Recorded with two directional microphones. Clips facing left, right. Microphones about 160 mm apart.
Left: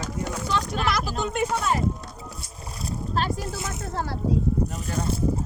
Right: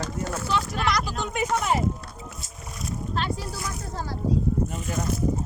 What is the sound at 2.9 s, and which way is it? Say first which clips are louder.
Boat: left 2 dB; 40° left (ahead or behind).